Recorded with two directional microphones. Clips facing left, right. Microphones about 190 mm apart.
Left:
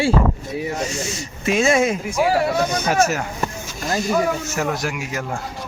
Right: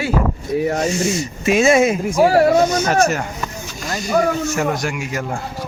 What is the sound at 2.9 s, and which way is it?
Speech, 5° left (ahead or behind).